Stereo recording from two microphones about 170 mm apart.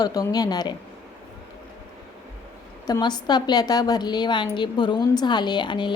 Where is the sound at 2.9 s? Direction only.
25° left (ahead or behind).